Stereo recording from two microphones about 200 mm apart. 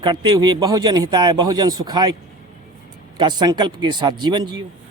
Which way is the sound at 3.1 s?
20° right (ahead or behind).